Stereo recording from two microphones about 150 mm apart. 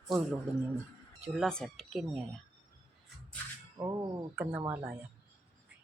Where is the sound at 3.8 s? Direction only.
25° right (ahead or behind).